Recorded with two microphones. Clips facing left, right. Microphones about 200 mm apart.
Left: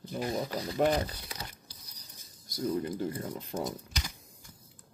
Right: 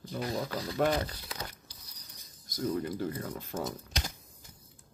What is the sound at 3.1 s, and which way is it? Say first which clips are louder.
Speech: left 1 dB; 20° left (ahead or behind).